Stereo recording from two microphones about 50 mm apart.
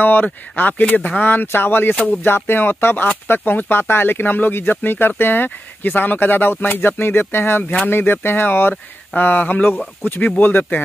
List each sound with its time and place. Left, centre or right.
0.0 s speech: left